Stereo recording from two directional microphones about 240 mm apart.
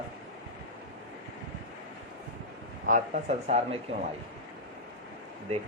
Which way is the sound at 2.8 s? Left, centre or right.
Right.